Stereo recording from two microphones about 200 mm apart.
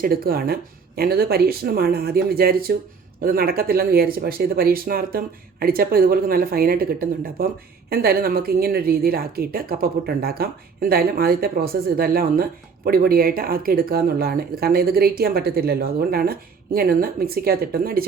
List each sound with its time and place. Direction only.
0.0 s speech: 50° right (ahead or behind)